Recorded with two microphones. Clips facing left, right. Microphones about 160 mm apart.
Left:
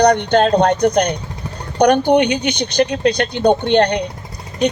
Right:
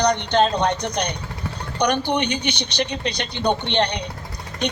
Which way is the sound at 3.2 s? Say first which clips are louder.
Left 8 dB; 50° left (ahead or behind).